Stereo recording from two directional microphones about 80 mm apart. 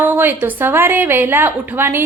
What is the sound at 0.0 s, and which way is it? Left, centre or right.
A woman's voice, right.